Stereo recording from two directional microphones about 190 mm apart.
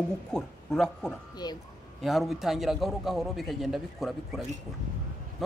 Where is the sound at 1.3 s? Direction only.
20° left (ahead or behind).